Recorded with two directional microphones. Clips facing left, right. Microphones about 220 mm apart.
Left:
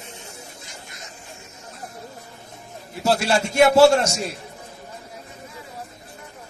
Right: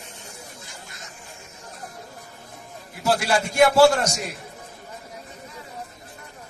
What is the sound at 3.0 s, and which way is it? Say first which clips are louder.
A man's voice: left 2 dB; 25° left (ahead or behind).